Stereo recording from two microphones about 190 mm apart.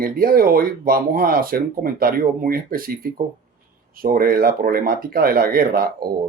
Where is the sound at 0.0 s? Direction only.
50° right (ahead or behind).